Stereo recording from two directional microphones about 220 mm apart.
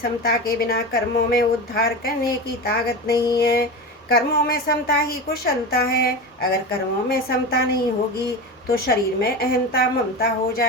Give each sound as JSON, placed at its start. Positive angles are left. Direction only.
{"t": 0.0, "sound": "a woman's voice", "side_deg": 45}
{"t": 8.9, "sound": "a woman's voice", "side_deg": 45}